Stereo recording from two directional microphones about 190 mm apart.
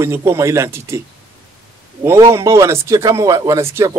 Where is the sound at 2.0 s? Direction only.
15° right (ahead or behind).